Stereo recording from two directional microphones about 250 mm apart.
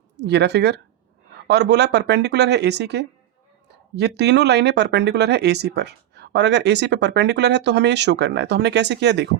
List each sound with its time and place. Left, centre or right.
0.3 s speech: right